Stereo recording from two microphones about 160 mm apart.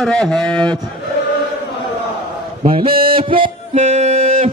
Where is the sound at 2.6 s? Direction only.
35° right (ahead or behind); by 4.5 s 50° right (ahead or behind).